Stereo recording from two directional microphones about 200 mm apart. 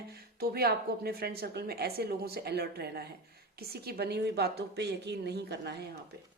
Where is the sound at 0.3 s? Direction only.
50° right (ahead or behind).